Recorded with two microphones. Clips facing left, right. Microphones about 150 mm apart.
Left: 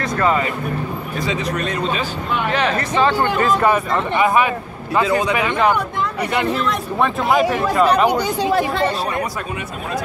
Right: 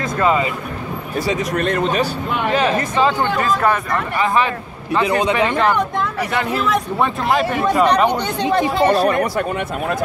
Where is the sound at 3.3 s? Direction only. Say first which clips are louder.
Left 1 dB; 5° left (ahead or behind).